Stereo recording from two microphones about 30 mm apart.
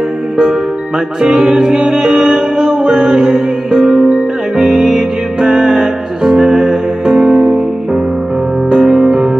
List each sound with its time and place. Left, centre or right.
1.2 s music: right
1.9 s music: centre
8.7 s music: right